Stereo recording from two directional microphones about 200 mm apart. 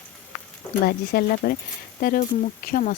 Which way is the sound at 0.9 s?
50° left (ahead or behind).